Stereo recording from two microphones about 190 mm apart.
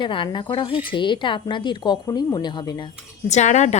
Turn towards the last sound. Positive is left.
turn(degrees=35)  # may be behind; listen again after turning